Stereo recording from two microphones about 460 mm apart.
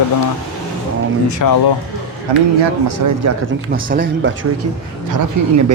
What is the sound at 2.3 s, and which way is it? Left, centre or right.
Speech, right.